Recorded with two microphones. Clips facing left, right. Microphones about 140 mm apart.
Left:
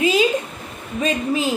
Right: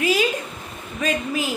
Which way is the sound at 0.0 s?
20° left (ahead or behind).